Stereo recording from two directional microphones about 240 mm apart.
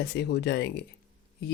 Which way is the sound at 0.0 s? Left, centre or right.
Left.